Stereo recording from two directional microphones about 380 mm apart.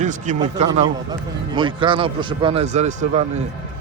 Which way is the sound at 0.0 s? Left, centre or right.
Centre.